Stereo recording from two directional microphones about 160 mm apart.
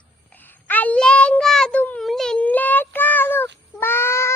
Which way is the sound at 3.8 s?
15° left (ahead or behind).